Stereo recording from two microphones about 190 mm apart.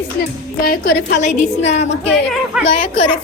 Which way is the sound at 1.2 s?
35° left (ahead or behind).